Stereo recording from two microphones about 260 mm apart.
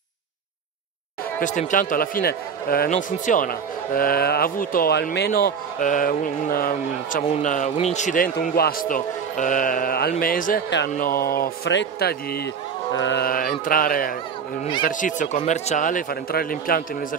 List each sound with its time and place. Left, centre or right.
1.4 s a man's voice: left